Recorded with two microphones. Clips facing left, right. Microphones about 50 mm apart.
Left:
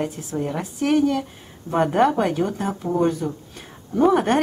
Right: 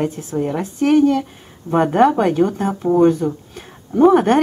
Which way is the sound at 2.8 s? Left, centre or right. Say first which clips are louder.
Right 8 dB; centre.